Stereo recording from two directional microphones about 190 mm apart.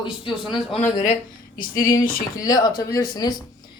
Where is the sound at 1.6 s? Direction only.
45° left (ahead or behind).